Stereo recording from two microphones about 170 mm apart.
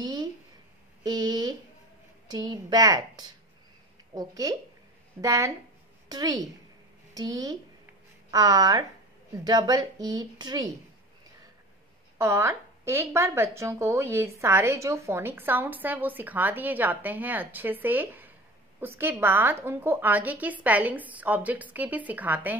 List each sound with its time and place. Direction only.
0.0 s a sound: 25° right (ahead or behind)
1.0 s a woman's voice: 25° right (ahead or behind)
12.2 s a woman's voice: 15° right (ahead or behind)